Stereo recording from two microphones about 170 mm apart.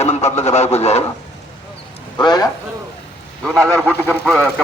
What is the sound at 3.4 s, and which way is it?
Speech, 5° left (ahead or behind).